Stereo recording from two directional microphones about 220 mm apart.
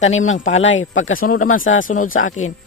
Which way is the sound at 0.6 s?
60° left (ahead or behind).